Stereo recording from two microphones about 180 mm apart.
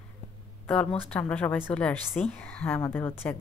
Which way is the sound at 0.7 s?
5° left (ahead or behind).